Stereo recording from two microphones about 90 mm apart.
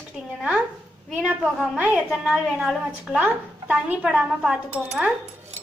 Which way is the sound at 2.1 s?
5° right (ahead or behind).